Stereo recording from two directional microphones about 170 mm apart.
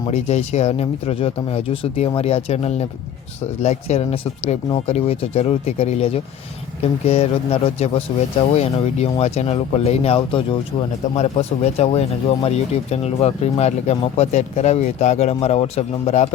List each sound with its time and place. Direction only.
0.1 s speech: 40° left (ahead or behind)